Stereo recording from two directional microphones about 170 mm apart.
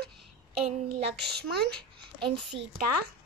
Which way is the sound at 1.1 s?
75° right (ahead or behind).